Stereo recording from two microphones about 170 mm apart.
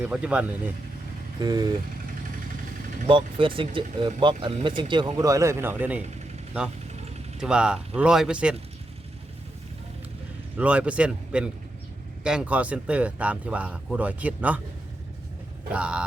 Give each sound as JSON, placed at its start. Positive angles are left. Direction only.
{"t": 0.0, "sound": "speech", "side_deg": -5}
{"t": 1.4, "sound": "speech", "side_deg": -25}
{"t": 3.1, "sound": "speech", "side_deg": -30}
{"t": 7.3, "sound": "speech", "side_deg": -5}
{"t": 10.6, "sound": "speech", "side_deg": -5}
{"t": 15.7, "sound": "speech", "side_deg": -5}